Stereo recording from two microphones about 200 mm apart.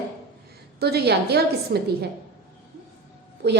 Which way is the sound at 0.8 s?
55° right (ahead or behind).